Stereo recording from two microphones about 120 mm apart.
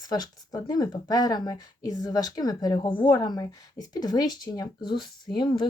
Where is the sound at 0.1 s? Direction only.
35° left (ahead or behind).